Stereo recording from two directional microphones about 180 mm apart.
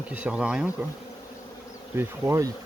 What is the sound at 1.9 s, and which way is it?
Speech, 15° right (ahead or behind).